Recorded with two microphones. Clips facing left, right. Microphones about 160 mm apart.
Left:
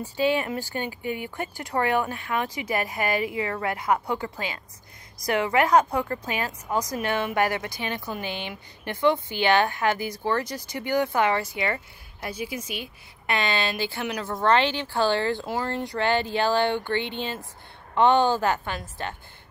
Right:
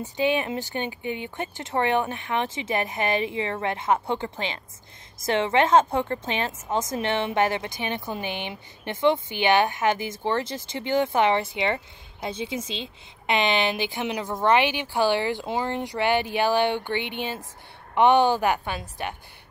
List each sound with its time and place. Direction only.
0.0 s a woman's voice: 20° right (ahead or behind)